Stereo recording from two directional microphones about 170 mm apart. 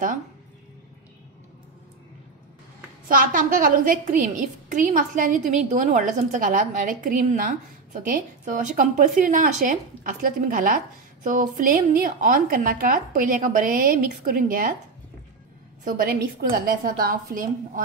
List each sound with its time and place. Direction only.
3.1 s a woman's voice: 55° right (ahead or behind)
15.8 s a woman's voice: 60° right (ahead or behind)